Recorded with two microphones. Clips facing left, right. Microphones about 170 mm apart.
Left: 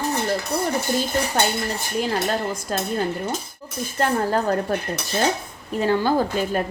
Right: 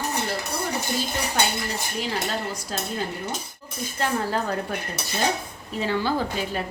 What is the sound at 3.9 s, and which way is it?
Speech, 45° left (ahead or behind).